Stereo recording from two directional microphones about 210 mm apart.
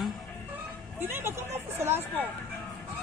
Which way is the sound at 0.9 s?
10° right (ahead or behind).